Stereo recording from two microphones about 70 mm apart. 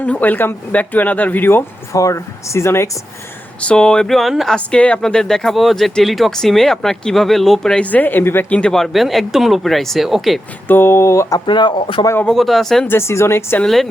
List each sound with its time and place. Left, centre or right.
0.0 s speech: left
1.9 s speech: left
3.6 s a sound: centre
4.5 s a sound: centre
5.0 s speech: centre
7.8 s speech: left
8.4 s a sound: centre
8.7 s speech: centre
10.7 s speech: left
11.3 s speech: left
12.3 s speech: centre
12.9 s speech: left
13.7 s speech: centre